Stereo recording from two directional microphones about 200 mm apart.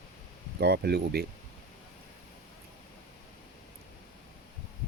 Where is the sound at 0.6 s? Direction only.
55° right (ahead or behind).